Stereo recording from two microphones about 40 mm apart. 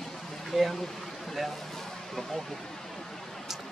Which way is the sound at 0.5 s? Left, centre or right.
Centre.